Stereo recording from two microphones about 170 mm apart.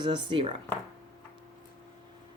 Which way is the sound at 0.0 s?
30° right (ahead or behind).